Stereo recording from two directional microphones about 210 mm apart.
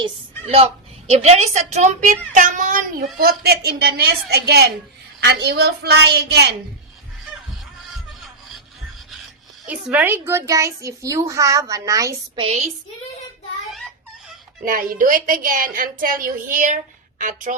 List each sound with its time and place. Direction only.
1.1 s a woman's voice: 30° right (ahead or behind)
3.2 s a woman's voice: 45° right (ahead or behind)
9.9 s a woman's voice: 10° right (ahead or behind)
12.4 s a woman's voice: 30° right (ahead or behind)
14.6 s a woman's voice: 45° right (ahead or behind)